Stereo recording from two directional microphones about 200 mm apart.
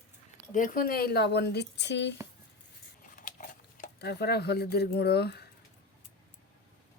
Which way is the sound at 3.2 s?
45° left (ahead or behind).